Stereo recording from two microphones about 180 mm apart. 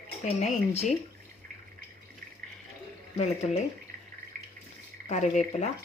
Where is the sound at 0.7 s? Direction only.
35° left (ahead or behind).